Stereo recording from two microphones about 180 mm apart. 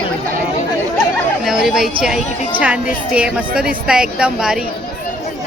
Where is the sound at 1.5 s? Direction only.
Centre (ahead or behind).